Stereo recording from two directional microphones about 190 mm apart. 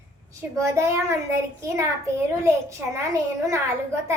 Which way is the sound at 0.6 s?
15° right (ahead or behind).